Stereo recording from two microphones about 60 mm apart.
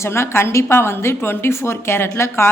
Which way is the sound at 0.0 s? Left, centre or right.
Left.